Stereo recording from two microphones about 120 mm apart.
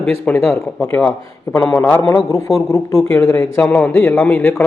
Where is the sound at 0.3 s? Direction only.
10° left (ahead or behind).